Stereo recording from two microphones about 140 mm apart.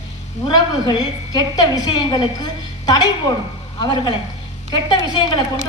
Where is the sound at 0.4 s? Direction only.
30° left (ahead or behind).